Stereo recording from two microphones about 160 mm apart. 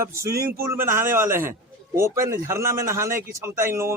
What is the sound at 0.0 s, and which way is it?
A man's voice, 15° right (ahead or behind).